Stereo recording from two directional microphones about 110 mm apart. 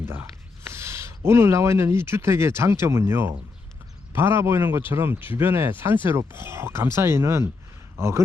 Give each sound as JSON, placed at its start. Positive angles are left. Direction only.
{"t": 0.0, "sound": "speech", "side_deg": -20}